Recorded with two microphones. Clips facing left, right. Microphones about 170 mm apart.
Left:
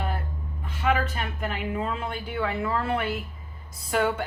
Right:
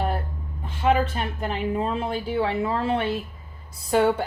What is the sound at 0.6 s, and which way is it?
Speech, 30° right (ahead or behind).